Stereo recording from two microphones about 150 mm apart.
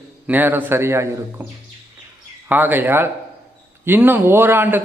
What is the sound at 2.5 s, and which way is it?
A man's voice, 15° right (ahead or behind).